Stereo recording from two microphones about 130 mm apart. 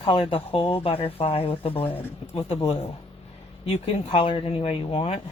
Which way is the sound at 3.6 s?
45° left (ahead or behind).